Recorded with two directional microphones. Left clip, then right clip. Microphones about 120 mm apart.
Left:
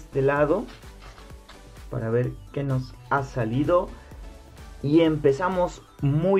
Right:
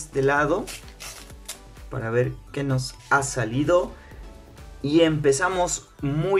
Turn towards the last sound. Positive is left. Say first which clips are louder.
# left 2 dB
turn(degrees=10)  # may be behind; listen again after turning